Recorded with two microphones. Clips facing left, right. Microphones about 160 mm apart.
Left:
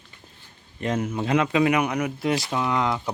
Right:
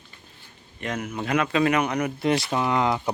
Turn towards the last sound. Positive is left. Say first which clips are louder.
# right 1 dB
turn(degrees=-5)  # may be behind; listen again after turning